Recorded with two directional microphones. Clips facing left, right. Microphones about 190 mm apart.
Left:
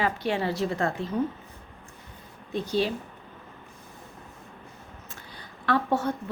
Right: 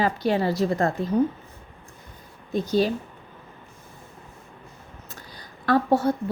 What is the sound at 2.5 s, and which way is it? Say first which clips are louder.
Speech: right 4 dB; 40° right (ahead or behind).